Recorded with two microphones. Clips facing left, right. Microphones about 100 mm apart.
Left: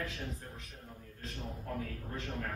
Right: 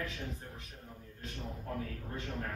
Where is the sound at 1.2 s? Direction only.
Centre (ahead or behind).